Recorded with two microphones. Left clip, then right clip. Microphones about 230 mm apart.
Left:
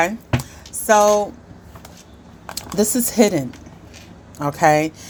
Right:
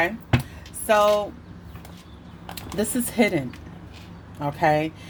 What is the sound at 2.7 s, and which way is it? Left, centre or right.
A woman's voice, left.